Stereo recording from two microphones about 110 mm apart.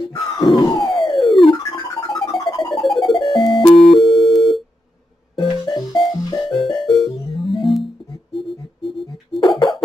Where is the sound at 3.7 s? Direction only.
Centre (ahead or behind).